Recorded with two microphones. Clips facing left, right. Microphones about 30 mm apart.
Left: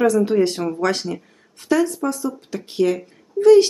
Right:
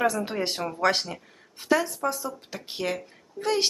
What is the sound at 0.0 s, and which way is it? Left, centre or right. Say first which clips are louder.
Speech: left 9 dB; centre.